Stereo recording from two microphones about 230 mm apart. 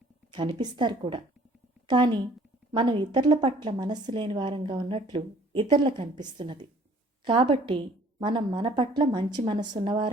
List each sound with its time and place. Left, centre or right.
0.3 s a woman's voice: centre
2.7 s a woman's voice: centre